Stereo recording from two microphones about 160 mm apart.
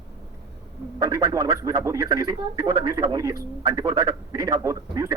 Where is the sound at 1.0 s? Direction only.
25° right (ahead or behind).